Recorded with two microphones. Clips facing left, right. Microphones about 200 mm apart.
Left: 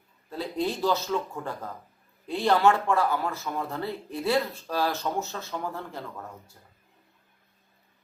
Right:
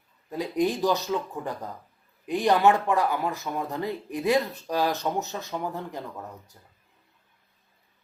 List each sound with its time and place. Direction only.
0.3 s speech: 15° right (ahead or behind)